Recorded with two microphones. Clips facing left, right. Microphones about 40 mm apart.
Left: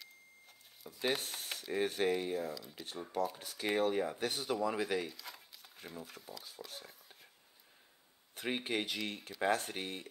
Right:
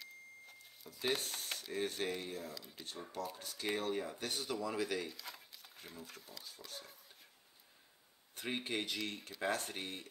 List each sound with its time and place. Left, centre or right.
0.9 s speech: centre
5.1 s speech: centre
8.4 s speech: centre